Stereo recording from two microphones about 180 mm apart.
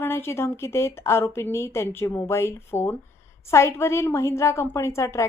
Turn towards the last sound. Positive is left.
turn(degrees=15)  # may be behind; listen again after turning